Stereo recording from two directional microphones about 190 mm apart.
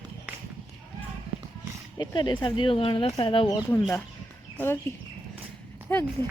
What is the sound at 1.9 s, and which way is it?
Speech, 25° left (ahead or behind).